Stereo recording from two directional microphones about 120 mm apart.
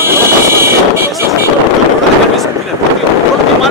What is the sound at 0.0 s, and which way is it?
Vehicle, 20° right (ahead or behind).